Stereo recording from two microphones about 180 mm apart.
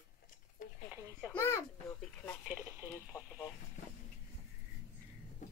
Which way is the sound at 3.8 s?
40° left (ahead or behind).